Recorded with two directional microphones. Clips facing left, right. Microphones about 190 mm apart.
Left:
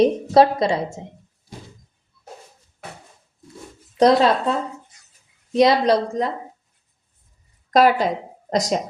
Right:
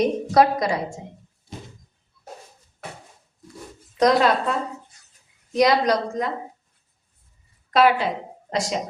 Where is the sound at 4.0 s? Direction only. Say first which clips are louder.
Left 3 dB; 30° left (ahead or behind).